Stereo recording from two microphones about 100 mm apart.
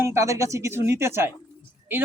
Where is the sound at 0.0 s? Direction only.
30° right (ahead or behind).